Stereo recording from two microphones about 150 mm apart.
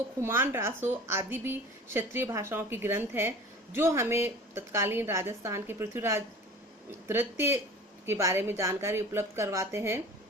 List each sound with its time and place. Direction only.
0.2 s a woman's voice: 15° right (ahead or behind)